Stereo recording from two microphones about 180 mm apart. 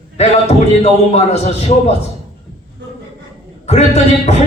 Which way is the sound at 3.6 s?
35° left (ahead or behind).